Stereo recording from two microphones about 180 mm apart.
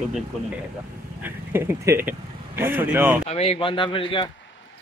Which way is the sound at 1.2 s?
10° right (ahead or behind).